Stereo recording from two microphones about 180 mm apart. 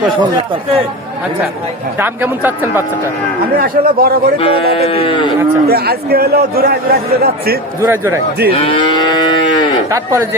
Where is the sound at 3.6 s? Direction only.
55° right (ahead or behind).